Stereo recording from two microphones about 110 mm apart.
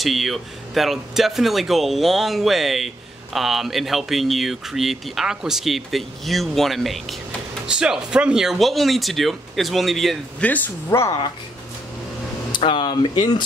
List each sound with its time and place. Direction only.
0.0 s speech: centre (ahead or behind)
10.4 s speech: 15° left (ahead or behind)
12.5 s speech: 45° left (ahead or behind)